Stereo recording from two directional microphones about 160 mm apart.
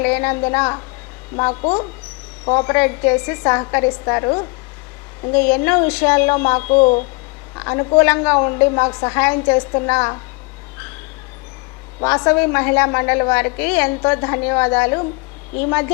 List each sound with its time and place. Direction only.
0.0 s a woman's voice: 15° left (ahead or behind)
2.7 s a woman's voice: 15° left (ahead or behind)
5.5 s a woman's voice: 10° left (ahead or behind)
6.7 s speech: 45° left (ahead or behind)
7.5 s a woman's voice: 20° left (ahead or behind)
12.0 s a woman's voice: 15° left (ahead or behind)